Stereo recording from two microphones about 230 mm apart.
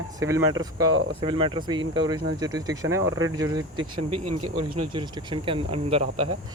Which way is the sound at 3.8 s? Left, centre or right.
Right.